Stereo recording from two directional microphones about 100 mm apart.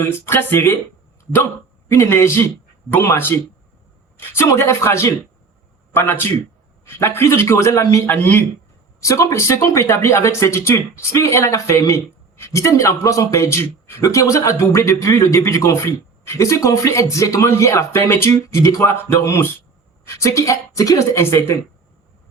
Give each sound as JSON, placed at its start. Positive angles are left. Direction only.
{"t": 0.0, "sound": "speech", "side_deg": 20}
{"t": 1.2, "sound": "dog", "side_deg": 20}
{"t": 1.9, "sound": "speech", "side_deg": 25}